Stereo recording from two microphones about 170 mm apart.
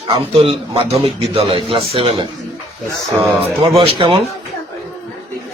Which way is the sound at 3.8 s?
30° right (ahead or behind).